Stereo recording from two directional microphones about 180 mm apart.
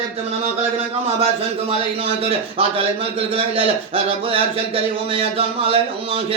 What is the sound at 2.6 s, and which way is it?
Speech, 30° right (ahead or behind).